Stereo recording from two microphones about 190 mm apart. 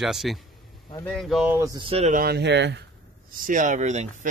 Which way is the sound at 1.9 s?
35° right (ahead or behind).